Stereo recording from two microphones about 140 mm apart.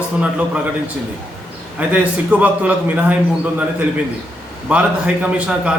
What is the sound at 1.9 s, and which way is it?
A man's voice, 10° right (ahead or behind).